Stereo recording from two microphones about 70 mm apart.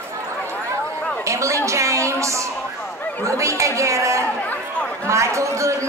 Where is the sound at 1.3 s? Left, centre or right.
Right.